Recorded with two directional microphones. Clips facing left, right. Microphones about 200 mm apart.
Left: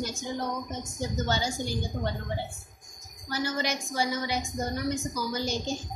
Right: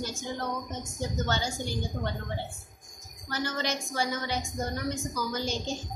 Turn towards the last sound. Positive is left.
turn(degrees=10)  # may be behind; listen again after turning